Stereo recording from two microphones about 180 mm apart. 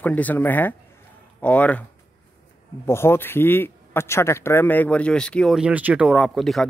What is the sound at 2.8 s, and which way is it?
Speech, 15° left (ahead or behind).